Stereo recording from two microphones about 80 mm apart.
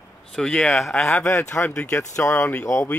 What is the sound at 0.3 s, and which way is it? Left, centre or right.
Speech, centre.